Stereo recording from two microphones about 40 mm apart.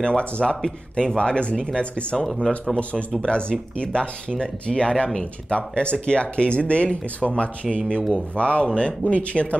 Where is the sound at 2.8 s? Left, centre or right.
Left.